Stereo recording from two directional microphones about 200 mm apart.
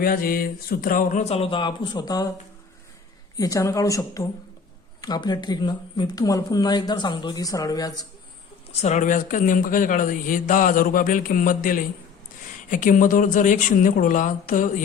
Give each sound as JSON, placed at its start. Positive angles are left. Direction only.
{"t": 0.0, "sound": "speech", "side_deg": 45}
{"t": 3.3, "sound": "speech", "side_deg": 15}
{"t": 8.7, "sound": "speech", "side_deg": 35}